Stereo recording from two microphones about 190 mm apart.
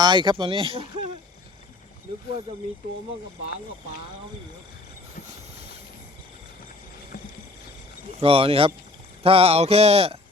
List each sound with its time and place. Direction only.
0.0 s speech: 25° right (ahead or behind)
7.1 s vehicle: 50° left (ahead or behind)
8.2 s speech: 30° right (ahead or behind)
9.2 s mantra: 30° right (ahead or behind)